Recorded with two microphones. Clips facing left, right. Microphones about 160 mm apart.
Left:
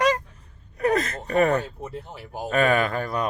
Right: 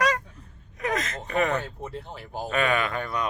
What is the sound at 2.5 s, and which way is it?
Speech, 40° left (ahead or behind).